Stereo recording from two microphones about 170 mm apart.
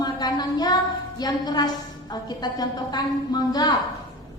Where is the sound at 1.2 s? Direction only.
25° left (ahead or behind).